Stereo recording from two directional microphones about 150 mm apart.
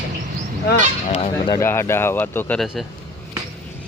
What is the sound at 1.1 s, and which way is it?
Honk, 40° left (ahead or behind).